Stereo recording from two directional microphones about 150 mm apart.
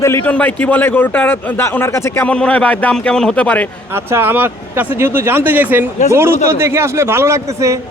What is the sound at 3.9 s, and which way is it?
A man's voice, 15° right (ahead or behind).